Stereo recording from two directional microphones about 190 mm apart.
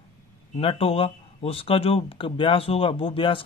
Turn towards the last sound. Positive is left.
turn(degrees=30)  # may be behind; listen again after turning